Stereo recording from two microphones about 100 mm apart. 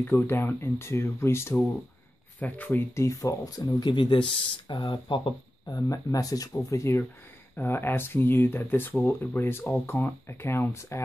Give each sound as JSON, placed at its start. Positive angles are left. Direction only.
{"t": 0.0, "sound": "speech", "side_deg": 20}
{"t": 3.0, "sound": "speech", "side_deg": 30}
{"t": 3.9, "sound": "speech", "side_deg": 55}
{"t": 5.7, "sound": "speech", "side_deg": 35}